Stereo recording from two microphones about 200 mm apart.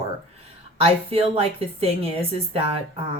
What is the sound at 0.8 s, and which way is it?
Speech, 30° right (ahead or behind).